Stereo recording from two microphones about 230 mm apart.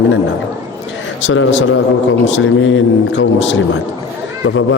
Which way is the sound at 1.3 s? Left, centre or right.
Left.